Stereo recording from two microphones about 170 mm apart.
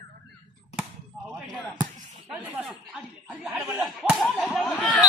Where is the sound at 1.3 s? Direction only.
Centre (ahead or behind).